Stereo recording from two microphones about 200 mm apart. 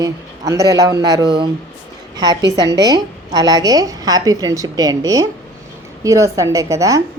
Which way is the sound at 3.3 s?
20° right (ahead or behind).